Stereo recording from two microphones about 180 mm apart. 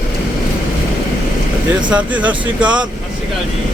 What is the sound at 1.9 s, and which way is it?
Speech, 10° right (ahead or behind).